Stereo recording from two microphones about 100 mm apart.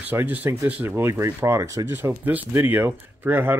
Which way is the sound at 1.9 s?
20° right (ahead or behind).